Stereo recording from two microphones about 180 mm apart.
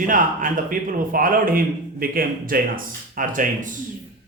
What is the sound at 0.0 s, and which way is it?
A man's voice, 50° right (ahead or behind).